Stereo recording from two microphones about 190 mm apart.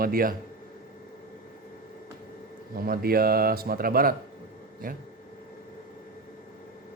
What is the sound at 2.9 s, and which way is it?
A man's voice, 50° right (ahead or behind).